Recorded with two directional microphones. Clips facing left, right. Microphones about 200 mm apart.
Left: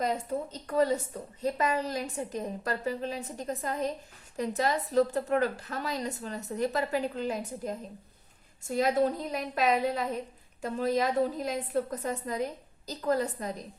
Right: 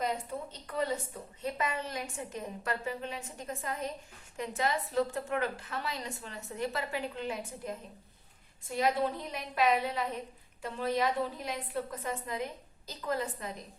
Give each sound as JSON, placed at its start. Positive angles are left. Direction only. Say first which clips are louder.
{"t": 0.0, "sound": "a woman's voice", "louder": "left 4 dB", "side_deg": 40}
{"t": 8.6, "sound": "a woman's voice", "louder": "left 4 dB", "side_deg": 45}